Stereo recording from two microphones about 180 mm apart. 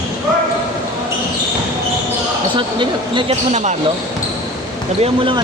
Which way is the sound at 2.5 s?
25° right (ahead or behind).